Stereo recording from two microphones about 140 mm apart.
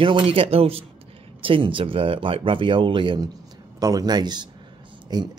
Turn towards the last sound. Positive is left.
turn(degrees=-30)  # may be behind; listen again after turning